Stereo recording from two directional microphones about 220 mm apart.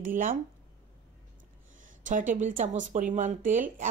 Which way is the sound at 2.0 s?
35° right (ahead or behind).